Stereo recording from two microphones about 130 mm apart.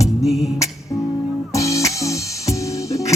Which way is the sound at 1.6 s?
25° left (ahead or behind).